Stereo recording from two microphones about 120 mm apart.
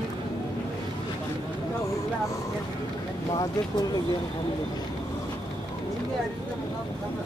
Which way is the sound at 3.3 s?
30° left (ahead or behind).